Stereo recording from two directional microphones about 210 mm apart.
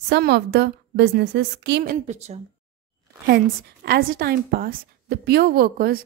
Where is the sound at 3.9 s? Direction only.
45° right (ahead or behind).